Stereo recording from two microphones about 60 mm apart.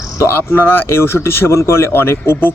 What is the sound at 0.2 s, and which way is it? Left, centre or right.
Speech, left.